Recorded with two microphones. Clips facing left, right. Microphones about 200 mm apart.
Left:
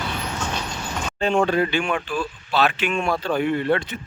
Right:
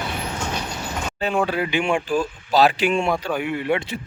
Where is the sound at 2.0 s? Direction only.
40° right (ahead or behind).